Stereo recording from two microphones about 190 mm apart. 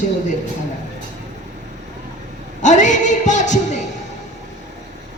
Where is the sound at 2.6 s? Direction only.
40° left (ahead or behind).